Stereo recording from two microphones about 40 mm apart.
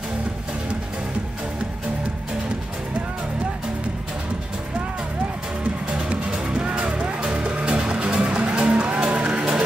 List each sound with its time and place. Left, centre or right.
5.6 s music: right